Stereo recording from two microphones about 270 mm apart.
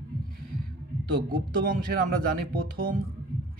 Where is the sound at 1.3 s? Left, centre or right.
Right.